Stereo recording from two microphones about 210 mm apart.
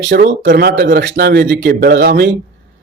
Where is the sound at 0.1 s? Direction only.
50° right (ahead or behind).